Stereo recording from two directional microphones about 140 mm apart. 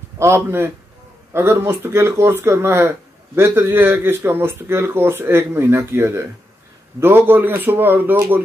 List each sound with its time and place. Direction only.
0.2 s speech: 15° right (ahead or behind)